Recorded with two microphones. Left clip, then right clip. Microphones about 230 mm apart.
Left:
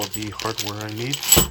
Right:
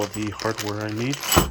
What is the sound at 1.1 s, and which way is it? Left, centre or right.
Speech, centre.